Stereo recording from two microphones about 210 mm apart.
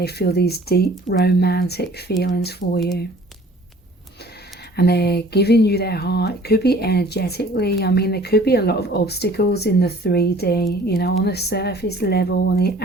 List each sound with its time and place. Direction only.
0.0 s speech: 50° left (ahead or behind)
4.8 s speech: 50° left (ahead or behind)